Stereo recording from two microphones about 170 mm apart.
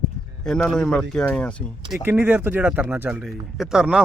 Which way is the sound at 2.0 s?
10° right (ahead or behind).